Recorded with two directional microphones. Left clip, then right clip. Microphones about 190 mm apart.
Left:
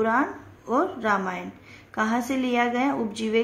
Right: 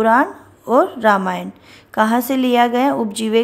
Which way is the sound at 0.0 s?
50° right (ahead or behind).